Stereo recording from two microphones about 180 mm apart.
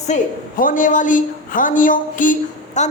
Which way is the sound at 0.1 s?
45° left (ahead or behind).